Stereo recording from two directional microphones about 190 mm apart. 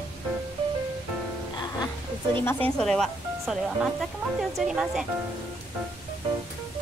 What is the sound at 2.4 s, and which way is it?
Speech, 5° left (ahead or behind).